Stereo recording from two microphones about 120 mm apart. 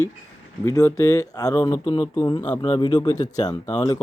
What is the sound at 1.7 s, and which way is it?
Speech, 60° left (ahead or behind).